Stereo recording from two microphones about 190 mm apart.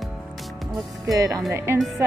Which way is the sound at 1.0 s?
15° right (ahead or behind).